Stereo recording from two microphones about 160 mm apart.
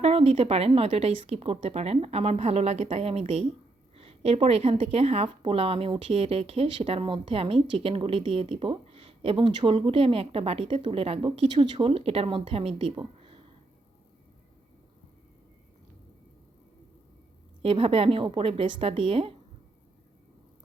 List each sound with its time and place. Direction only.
0.0 s a woman's voice: 40° right (ahead or behind)
17.6 s a woman's voice: 35° right (ahead or behind)